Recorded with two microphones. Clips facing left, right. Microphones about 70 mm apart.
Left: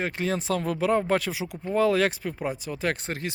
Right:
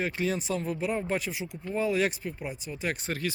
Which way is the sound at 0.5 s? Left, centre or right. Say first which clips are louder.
Left 6 dB; left.